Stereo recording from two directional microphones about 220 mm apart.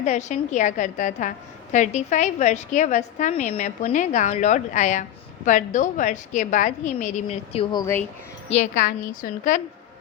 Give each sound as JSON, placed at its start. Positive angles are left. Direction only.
{"t": 0.0, "sound": "a woman's voice", "side_deg": 30}
{"t": 8.4, "sound": "a woman's voice", "side_deg": 35}